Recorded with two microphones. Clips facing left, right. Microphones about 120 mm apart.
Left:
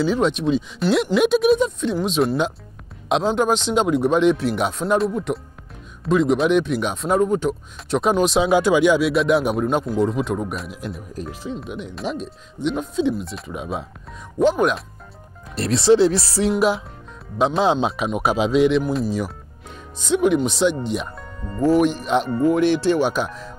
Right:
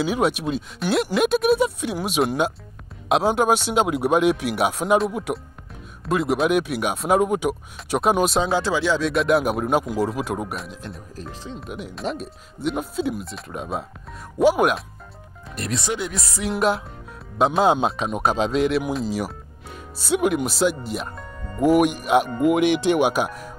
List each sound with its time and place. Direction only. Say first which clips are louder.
0.0 s speech: left 2 dB; 10° right (ahead or behind)
8.5 s speech: left 6 dB; 15° left (ahead or behind)
9.1 s speech: left 1 dB; centre (ahead or behind)
15.5 s speech: left 11 dB; 30° left (ahead or behind)
16.3 s music: left 7 dB; 35° left (ahead or behind)
16.5 s speech: left 2 dB; centre (ahead or behind)
21.5 s speech: even; 15° right (ahead or behind)